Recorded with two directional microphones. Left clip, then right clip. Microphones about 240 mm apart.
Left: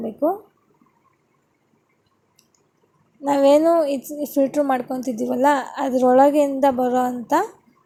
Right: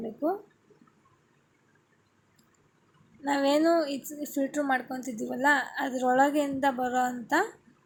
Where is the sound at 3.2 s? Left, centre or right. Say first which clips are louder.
Left 10 dB; centre.